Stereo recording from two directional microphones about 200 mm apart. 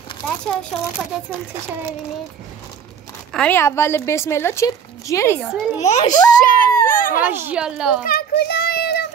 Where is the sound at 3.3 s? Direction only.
5° left (ahead or behind).